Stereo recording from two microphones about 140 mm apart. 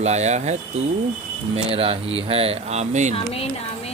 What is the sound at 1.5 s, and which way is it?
Speech, 45° right (ahead or behind).